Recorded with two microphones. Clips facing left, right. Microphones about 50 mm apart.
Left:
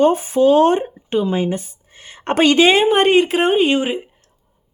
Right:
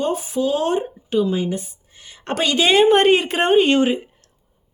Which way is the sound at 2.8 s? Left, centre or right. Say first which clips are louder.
Left 1 dB; centre.